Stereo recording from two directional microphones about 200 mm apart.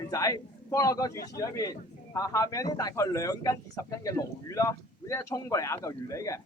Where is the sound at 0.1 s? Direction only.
20° left (ahead or behind).